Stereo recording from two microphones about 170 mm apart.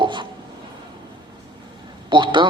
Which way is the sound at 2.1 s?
25° right (ahead or behind).